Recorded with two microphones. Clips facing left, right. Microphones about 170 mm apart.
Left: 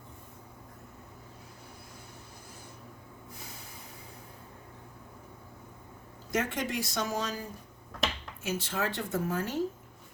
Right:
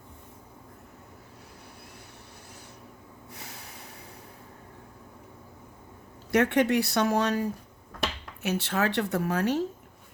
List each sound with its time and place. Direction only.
3.2 s snort: 70° right (ahead or behind)
6.3 s speech: 65° right (ahead or behind)